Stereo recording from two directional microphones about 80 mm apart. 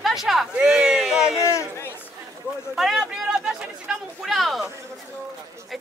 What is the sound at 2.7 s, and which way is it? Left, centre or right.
Speech, centre.